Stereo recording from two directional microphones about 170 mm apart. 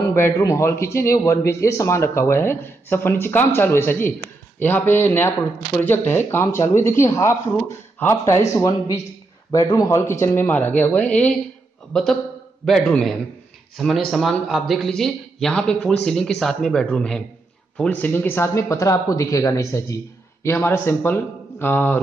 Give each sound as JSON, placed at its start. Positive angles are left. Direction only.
{"t": 0.1, "sound": "a man's voice", "side_deg": 20}